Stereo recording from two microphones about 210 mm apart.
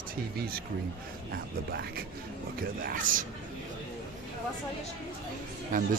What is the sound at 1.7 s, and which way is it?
Speech, 45° right (ahead or behind).